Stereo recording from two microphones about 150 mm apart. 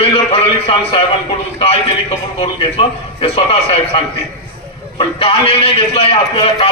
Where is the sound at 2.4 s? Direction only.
35° left (ahead or behind).